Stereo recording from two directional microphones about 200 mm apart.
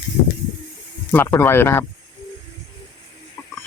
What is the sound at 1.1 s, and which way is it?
Speech, 10° left (ahead or behind).